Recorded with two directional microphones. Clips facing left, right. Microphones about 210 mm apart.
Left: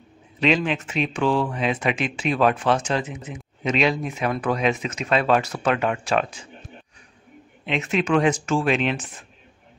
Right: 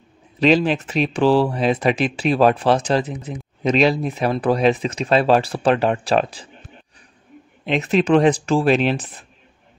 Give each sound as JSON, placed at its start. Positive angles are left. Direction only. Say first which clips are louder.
{"t": 0.4, "sound": "speech", "louder": "right 5 dB", "side_deg": -35}
{"t": 7.6, "sound": "speech", "louder": "right 5 dB", "side_deg": -35}